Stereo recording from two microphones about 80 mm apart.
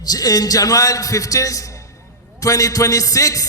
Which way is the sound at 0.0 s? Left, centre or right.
Left.